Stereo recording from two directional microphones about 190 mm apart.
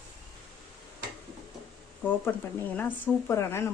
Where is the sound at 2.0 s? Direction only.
10° left (ahead or behind).